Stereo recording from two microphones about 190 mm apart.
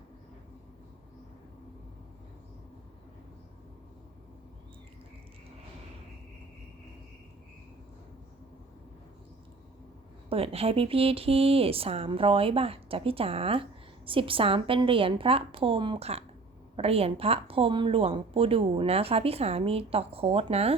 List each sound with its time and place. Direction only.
10.2 s a woman's voice: 30° right (ahead or behind)